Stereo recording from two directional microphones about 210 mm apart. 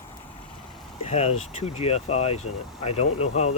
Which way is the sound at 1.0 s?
30° left (ahead or behind).